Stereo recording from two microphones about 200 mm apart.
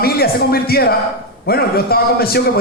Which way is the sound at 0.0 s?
50° left (ahead or behind).